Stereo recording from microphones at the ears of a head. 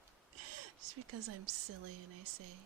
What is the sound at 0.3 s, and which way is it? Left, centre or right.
Speech, right.